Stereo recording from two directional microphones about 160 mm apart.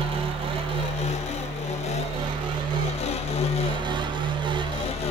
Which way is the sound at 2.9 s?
40° left (ahead or behind).